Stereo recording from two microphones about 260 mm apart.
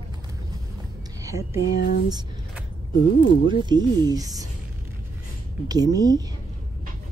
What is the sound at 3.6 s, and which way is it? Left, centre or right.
Speech, centre.